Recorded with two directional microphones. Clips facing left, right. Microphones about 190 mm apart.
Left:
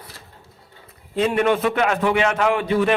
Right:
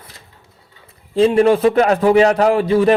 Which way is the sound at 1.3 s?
35° right (ahead or behind).